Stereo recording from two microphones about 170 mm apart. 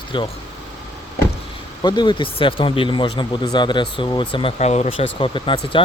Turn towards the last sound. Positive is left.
turn(degrees=30)  # may be behind; listen again after turning